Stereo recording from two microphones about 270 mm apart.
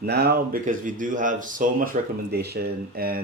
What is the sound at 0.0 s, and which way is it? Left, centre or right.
Speech, right.